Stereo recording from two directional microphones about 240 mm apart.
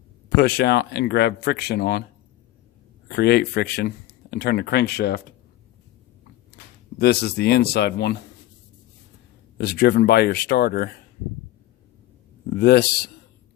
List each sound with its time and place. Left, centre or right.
0.3 s speech: left
3.1 s speech: left
7.0 s speech: left
9.6 s speech: left
12.5 s speech: left